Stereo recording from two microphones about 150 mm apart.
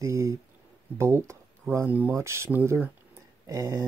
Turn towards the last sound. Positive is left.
turn(degrees=-20)  # may be behind; listen again after turning